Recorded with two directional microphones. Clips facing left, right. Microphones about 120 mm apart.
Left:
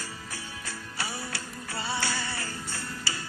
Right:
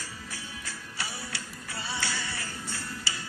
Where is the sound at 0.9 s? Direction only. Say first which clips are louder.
Left 3 dB; 45° left (ahead or behind).